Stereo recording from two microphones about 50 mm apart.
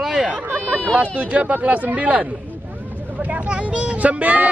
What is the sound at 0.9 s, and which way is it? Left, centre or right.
Speech, right.